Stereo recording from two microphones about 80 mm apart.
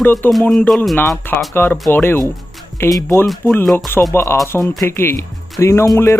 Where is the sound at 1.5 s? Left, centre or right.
Left.